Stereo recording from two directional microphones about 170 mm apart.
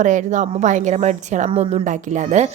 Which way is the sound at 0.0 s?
45° right (ahead or behind).